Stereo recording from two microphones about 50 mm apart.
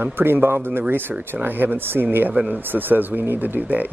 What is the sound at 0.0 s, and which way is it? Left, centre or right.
Speech, right.